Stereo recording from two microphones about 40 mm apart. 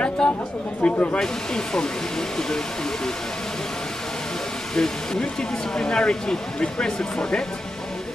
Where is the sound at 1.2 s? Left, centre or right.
Centre.